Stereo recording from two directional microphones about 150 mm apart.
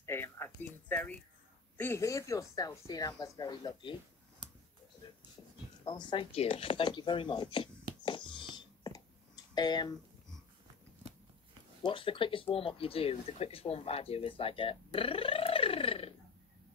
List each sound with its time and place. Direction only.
0.0 s a sound: 15° left (ahead or behind)
1.8 s a woman's voice: 15° left (ahead or behind)
5.9 s speech: 30° left (ahead or behind)
8.0 s a sound: 30° left (ahead or behind)
9.6 s a woman's voice: 25° left (ahead or behind)
11.8 s speech: 35° left (ahead or behind)